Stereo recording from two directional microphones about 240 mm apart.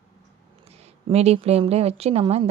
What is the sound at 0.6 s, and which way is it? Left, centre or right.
A woman's voice, right.